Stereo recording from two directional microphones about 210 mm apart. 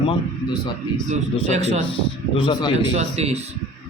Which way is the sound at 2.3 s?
25° left (ahead or behind).